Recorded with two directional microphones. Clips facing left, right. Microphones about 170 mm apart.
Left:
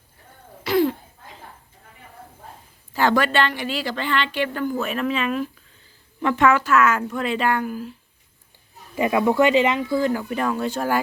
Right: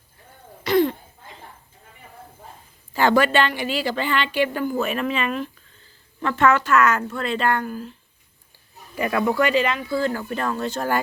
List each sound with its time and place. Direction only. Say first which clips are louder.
0.6 s cough: right 1 dB; 5° left (ahead or behind)
2.9 s a woman's voice: right 2 dB; centre (ahead or behind)
6.2 s speech: left 1 dB; 10° left (ahead or behind)
9.0 s speech: left 3 dB; 20° left (ahead or behind)